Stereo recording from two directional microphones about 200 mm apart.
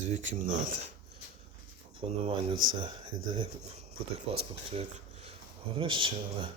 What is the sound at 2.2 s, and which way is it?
Speech, 25° right (ahead or behind).